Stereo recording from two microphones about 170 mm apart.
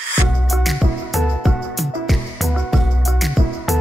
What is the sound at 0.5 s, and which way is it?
Music, centre (ahead or behind).